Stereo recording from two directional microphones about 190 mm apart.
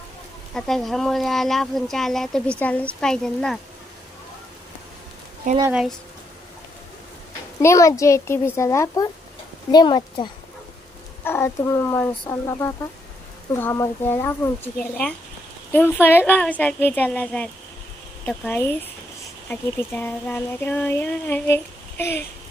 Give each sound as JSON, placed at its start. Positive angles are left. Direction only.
{"t": 0.5, "sound": "speech", "side_deg": 0}
{"t": 5.5, "sound": "speech", "side_deg": -45}
{"t": 7.6, "sound": "speech", "side_deg": 15}
{"t": 11.2, "sound": "speech", "side_deg": 10}
{"t": 15.7, "sound": "speech", "side_deg": 10}